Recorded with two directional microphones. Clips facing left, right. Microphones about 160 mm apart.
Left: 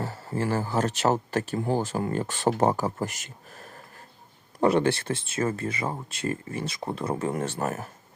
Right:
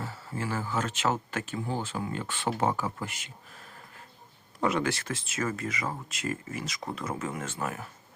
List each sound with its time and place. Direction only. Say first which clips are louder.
0.0 s speech: left 6 dB; 40° left (ahead or behind)
4.6 s speech: left 6 dB; 30° left (ahead or behind)